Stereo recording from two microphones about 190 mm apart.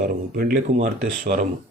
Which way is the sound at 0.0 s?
50° right (ahead or behind).